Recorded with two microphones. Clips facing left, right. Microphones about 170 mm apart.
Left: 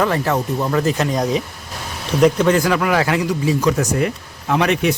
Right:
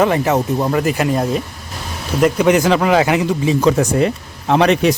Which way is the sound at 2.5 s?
20° right (ahead or behind).